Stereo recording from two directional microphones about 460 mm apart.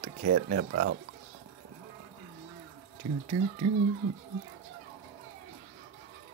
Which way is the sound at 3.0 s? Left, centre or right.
Right.